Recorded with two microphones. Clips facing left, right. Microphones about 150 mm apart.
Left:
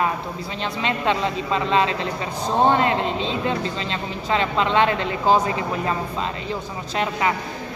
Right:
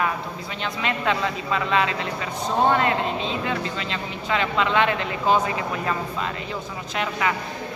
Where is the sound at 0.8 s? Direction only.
30° left (ahead or behind).